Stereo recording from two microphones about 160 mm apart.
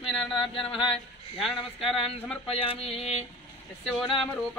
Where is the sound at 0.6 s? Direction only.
35° left (ahead or behind).